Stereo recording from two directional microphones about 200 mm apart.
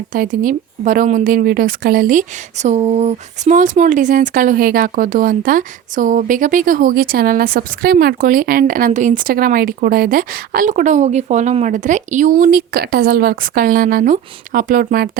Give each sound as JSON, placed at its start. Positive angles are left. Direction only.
{"t": 0.1, "sound": "speech", "side_deg": -45}